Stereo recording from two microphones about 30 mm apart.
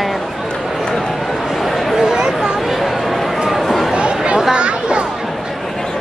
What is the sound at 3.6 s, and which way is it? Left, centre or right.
Chatter, centre.